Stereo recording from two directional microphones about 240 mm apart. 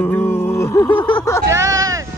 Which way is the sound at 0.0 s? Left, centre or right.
Centre.